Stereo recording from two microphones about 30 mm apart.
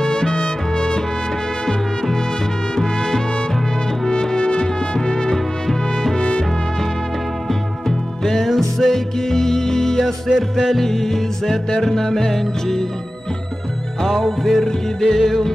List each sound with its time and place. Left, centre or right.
0.0 s music: left
2.7 s music: centre
4.6 s trumpet: left
5.3 s music: centre
8.2 s music: centre
10.0 s music: centre
14.0 s music: centre